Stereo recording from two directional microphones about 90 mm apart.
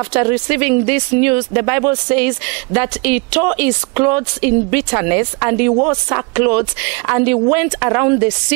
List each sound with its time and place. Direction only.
0.1 s speech: 15° right (ahead or behind)